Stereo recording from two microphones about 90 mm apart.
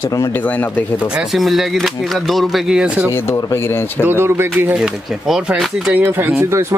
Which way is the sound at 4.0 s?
25° right (ahead or behind).